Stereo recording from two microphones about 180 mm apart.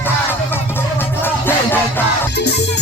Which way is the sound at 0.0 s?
10° left (ahead or behind).